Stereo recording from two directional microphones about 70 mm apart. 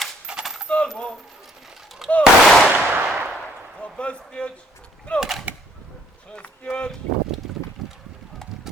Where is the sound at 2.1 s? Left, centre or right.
Centre.